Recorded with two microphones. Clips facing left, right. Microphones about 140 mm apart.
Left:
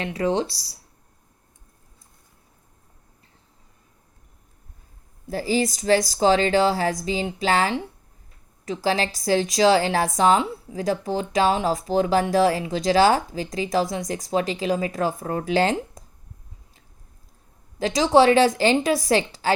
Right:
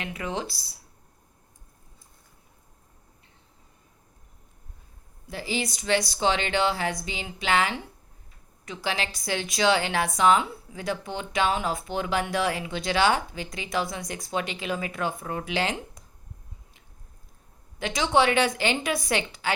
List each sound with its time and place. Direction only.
0.0 s a woman's voice: 35° left (ahead or behind)
5.3 s a woman's voice: 40° left (ahead or behind)
17.7 s a woman's voice: 35° left (ahead or behind)